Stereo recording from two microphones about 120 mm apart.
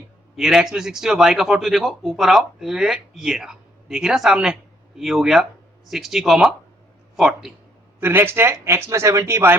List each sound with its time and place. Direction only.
0.3 s speech: 5° right (ahead or behind)
7.9 s speech: 20° right (ahead or behind)